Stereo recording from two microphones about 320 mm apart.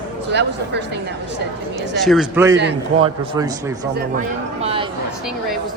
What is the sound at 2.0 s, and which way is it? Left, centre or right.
A man's voice, centre.